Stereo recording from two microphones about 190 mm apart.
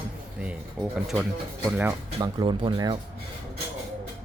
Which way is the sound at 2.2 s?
25° right (ahead or behind).